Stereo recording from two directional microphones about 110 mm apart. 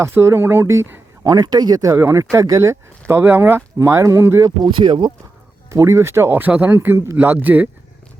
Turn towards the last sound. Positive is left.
turn(degrees=-15)  # may be behind; listen again after turning